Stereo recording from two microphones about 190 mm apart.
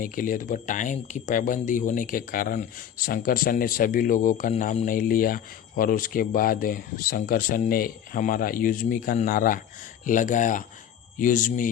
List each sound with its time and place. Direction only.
0.0 s speech: 45° left (ahead or behind)